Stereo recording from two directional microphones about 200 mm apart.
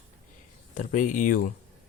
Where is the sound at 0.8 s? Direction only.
40° left (ahead or behind).